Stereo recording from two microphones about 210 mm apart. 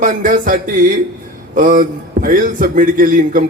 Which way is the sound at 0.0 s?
40° right (ahead or behind).